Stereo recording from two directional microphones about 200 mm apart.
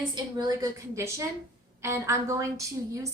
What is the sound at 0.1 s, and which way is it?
A woman's voice, 20° right (ahead or behind).